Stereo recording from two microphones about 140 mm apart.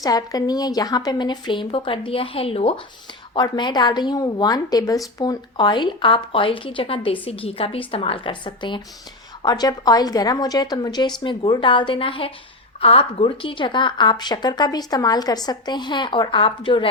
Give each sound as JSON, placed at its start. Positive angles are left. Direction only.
{"t": 0.0, "sound": "speech", "side_deg": 25}
{"t": 3.3, "sound": "a woman's voice", "side_deg": 30}